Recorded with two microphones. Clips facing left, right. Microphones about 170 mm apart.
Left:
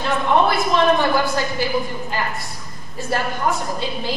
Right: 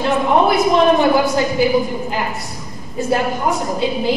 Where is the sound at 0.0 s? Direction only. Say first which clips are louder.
Right 3 dB; 5° right (ahead or behind).